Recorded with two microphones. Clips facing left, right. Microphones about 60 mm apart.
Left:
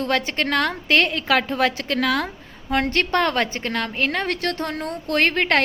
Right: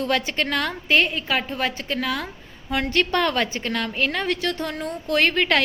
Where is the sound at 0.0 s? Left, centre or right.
Left.